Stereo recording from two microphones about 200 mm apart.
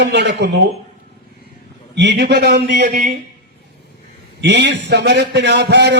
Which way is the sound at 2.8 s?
40° right (ahead or behind).